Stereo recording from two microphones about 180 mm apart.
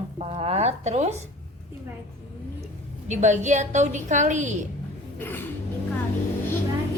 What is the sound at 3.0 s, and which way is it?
A woman's voice, 40° right (ahead or behind).